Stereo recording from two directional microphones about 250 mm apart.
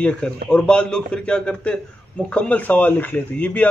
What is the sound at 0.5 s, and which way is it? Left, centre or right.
A man's voice, centre.